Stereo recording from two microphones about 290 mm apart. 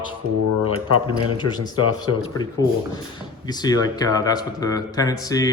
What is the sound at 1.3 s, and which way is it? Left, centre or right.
Speech, centre.